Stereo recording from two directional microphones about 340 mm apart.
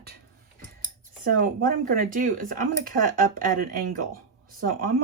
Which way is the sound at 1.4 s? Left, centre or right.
Right.